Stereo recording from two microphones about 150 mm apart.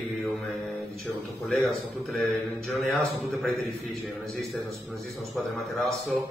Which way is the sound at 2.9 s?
Centre (ahead or behind).